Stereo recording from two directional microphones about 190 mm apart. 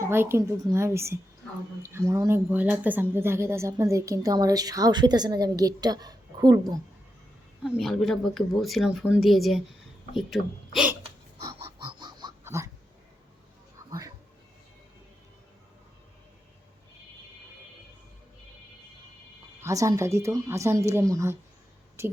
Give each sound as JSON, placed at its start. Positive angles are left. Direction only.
{"t": 0.0, "sound": "speech", "side_deg": -15}
{"t": 7.6, "sound": "speech", "side_deg": 0}
{"t": 11.4, "sound": "wheeze", "side_deg": -25}
{"t": 19.6, "sound": "speech", "side_deg": -15}